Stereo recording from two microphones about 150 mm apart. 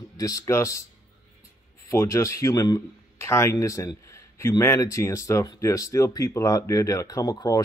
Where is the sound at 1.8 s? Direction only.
20° left (ahead or behind).